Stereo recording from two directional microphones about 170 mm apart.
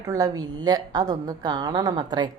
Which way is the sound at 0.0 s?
20° right (ahead or behind).